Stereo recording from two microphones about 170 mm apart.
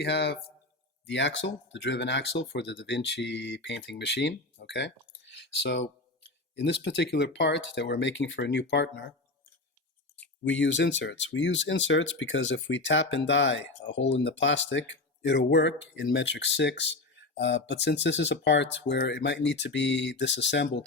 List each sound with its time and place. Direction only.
0.0 s speech: 80° left
10.2 s a sound: 10° left (ahead or behind)
10.5 s speech: 90° left